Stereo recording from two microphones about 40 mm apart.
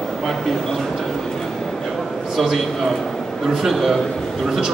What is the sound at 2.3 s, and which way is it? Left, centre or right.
Speech, centre.